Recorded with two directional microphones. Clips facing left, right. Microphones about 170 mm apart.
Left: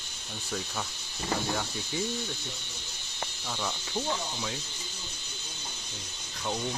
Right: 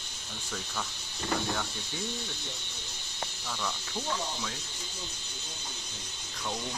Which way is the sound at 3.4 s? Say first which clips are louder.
Left 2 dB; 15° left (ahead or behind).